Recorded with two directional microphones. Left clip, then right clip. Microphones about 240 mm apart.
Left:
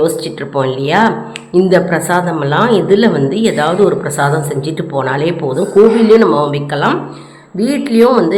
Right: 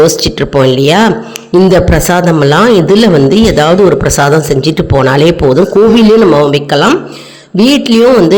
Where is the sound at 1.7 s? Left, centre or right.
Right.